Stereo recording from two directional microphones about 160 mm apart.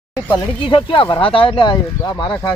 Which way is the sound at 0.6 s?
30° left (ahead or behind).